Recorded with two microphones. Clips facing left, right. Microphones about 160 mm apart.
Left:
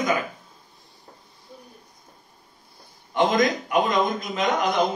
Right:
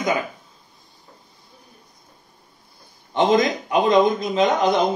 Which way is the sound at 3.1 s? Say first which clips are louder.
Right 3 dB; 25° right (ahead or behind).